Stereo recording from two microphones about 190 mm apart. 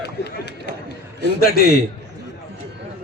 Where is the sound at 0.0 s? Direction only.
60° left (ahead or behind).